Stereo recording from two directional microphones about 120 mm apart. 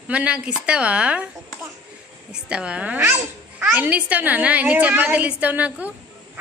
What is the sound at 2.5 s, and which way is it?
Speech, 10° right (ahead or behind).